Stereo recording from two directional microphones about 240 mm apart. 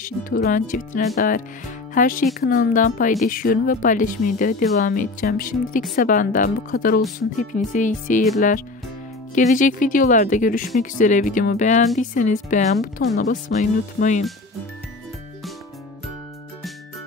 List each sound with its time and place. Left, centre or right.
0.0 s speech: left